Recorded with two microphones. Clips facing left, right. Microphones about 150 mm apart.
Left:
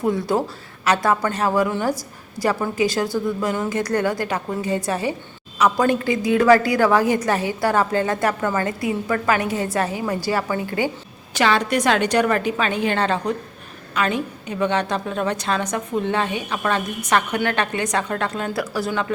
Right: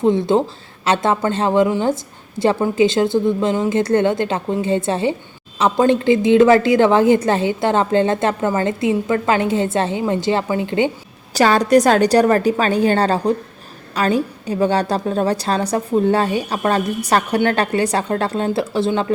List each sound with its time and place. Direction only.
0.0 s a woman's voice: 25° right (ahead or behind)
11.3 s a woman's voice: 40° right (ahead or behind)